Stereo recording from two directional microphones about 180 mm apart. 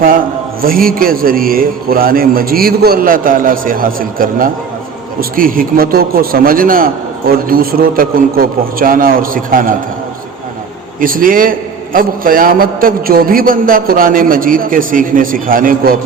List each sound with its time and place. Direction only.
0.6 s a man's voice: 55° right (ahead or behind)
11.0 s a man's voice: 50° right (ahead or behind)